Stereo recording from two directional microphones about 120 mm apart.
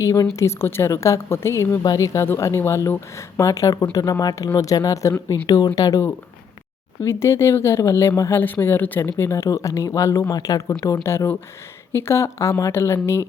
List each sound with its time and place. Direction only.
0.0 s speech: 25° left (ahead or behind)
7.0 s speech: 20° left (ahead or behind)